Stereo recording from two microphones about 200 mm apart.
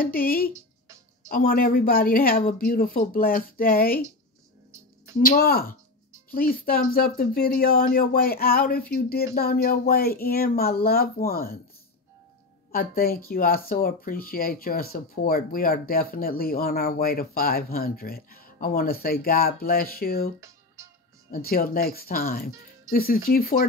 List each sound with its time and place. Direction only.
0.0 s speech: 45° left (ahead or behind)
5.3 s speech: 50° left (ahead or behind)
12.7 s speech: 45° left (ahead or behind)